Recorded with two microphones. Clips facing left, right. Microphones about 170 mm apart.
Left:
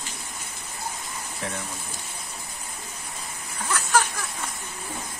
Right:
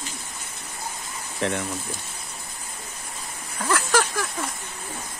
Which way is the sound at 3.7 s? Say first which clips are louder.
Right 2 dB; 90° right.